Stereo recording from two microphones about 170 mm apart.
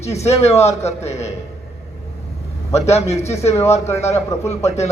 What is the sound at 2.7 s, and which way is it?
Speech, 40° left (ahead or behind).